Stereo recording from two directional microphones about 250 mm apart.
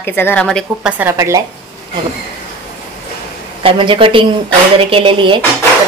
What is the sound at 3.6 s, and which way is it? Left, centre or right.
A woman's voice, right.